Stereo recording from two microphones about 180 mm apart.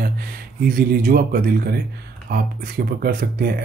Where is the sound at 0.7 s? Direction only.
55° right (ahead or behind).